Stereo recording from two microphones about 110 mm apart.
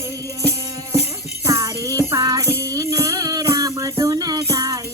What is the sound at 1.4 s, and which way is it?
Music, 25° right (ahead or behind).